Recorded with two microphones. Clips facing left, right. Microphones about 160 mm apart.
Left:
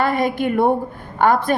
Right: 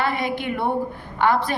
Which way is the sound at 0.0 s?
45° left (ahead or behind).